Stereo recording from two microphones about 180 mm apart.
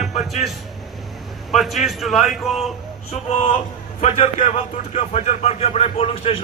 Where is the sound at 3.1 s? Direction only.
35° left (ahead or behind).